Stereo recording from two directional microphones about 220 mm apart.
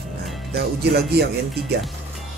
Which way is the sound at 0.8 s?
45° right (ahead or behind).